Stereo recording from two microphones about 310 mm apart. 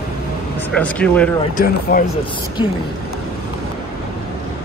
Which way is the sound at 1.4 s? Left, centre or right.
Left.